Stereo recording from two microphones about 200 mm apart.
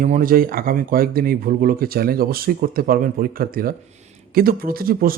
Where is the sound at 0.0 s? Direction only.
45° right (ahead or behind).